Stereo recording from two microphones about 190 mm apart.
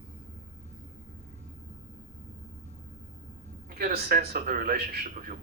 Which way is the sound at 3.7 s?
50° right (ahead or behind).